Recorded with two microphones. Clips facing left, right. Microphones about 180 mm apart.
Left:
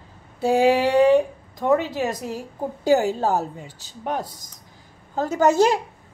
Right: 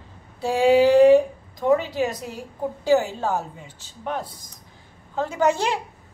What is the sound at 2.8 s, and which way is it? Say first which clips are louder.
A woman's voice: left 2 dB; 40° left (ahead or behind).